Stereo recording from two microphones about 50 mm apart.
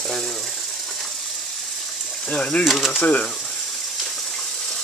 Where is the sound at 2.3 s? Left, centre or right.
Left.